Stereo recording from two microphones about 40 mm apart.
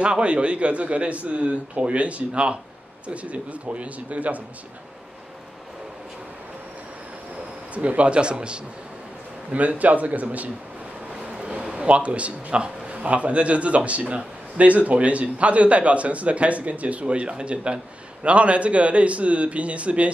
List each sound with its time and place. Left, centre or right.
0.0 s a man's voice: right
7.7 s a man's voice: right
9.5 s a man's voice: right